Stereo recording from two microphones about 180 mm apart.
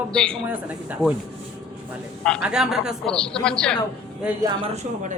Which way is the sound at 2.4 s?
5° right (ahead or behind).